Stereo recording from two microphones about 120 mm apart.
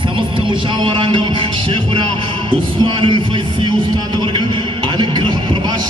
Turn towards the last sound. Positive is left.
turn(degrees=-40)  # may be behind; listen again after turning